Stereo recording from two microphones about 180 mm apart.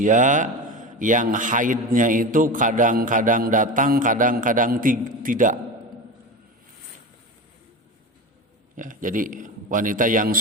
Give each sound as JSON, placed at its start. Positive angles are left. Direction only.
{"t": 0.0, "sound": "a man's voice", "side_deg": -45}
{"t": 8.7, "sound": "a man's voice", "side_deg": -45}